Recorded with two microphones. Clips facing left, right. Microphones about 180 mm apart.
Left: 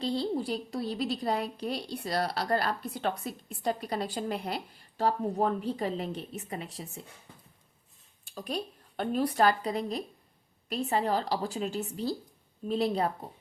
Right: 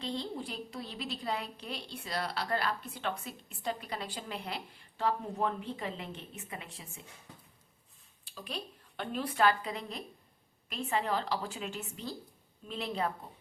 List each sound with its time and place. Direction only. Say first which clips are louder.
0.0 s a woman's voice: left 7 dB; 35° left (ahead or behind)
8.2 s a woman's voice: left 7 dB; 45° left (ahead or behind)